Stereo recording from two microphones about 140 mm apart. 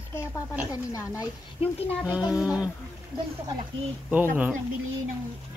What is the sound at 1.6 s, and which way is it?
Speech, 45° left (ahead or behind).